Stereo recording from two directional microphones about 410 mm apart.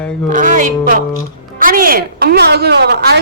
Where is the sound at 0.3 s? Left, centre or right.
Centre.